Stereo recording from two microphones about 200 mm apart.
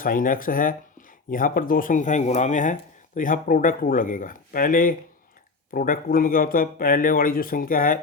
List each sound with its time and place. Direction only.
0.0 s a man's voice: 45° left (ahead or behind)